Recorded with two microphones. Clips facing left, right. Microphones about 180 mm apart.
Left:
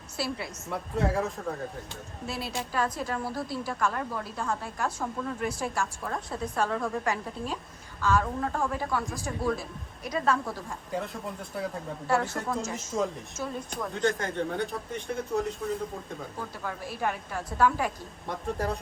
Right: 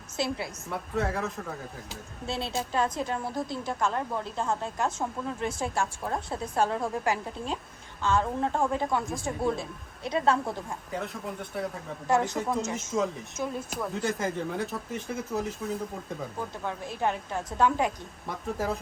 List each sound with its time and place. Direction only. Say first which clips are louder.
0.2 s a woman's voice: right 2 dB; 20° right (ahead or behind)
0.7 s speech: left 2 dB; centre (ahead or behind)
2.2 s a woman's voice: right 3 dB; 25° right (ahead or behind)
10.9 s speech: left 1 dB; centre (ahead or behind)
12.0 s a woman's voice: right 2 dB; 15° right (ahead or behind)
12.4 s speech: right 2 dB; centre (ahead or behind)
16.6 s a woman's voice: right 2 dB; 20° right (ahead or behind)
18.3 s speech: even; centre (ahead or behind)